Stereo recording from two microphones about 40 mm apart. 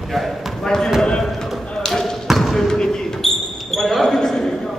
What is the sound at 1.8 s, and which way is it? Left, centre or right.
Basketball bounce, centre.